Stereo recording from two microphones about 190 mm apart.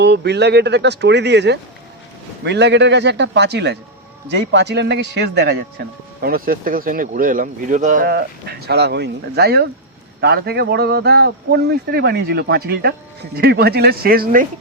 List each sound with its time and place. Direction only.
0.0 s a man's voice: 65° right (ahead or behind)
6.2 s a man's voice: 50° right (ahead or behind)